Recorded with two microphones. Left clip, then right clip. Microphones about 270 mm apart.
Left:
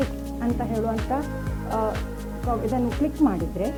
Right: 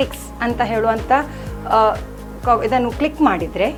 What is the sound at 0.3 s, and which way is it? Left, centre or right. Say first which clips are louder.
Speech: right 9 dB; centre.